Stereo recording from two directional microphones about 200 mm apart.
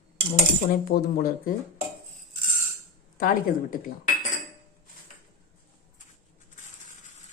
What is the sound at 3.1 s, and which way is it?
Speech, 45° left (ahead or behind).